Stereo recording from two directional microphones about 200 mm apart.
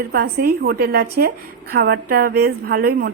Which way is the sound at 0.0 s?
50° right (ahead or behind).